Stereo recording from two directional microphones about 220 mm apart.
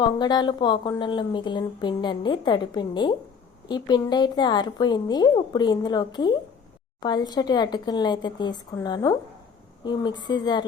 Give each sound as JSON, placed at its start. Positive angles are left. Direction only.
{"t": 0.0, "sound": "a woman's voice", "side_deg": 20}